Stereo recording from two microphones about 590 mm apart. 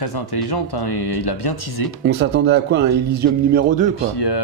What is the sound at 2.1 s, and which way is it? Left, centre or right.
A man's voice, centre.